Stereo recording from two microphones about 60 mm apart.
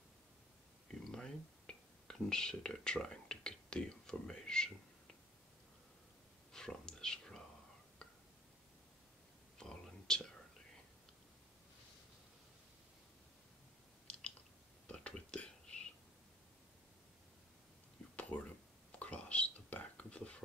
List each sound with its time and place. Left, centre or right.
0.8 s a sound: centre
6.5 s whispering: centre
9.6 s whispering: centre
14.1 s chewing: centre
14.9 s whispering: centre
18.1 s whispering: left